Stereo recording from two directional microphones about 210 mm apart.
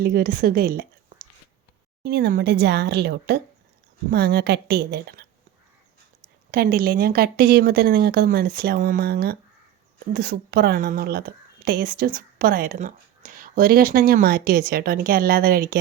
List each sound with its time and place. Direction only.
0.0 s a woman's voice: 45° right (ahead or behind)
6.5 s speech: 45° right (ahead or behind)